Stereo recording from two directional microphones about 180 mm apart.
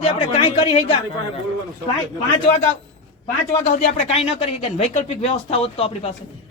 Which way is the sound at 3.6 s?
40° left (ahead or behind).